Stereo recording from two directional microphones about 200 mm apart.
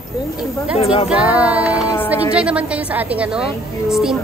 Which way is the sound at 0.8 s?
30° left (ahead or behind).